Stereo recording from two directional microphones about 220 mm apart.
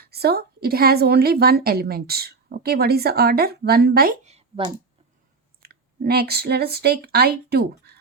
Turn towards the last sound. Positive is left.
turn(degrees=-45)  # may be behind; listen again after turning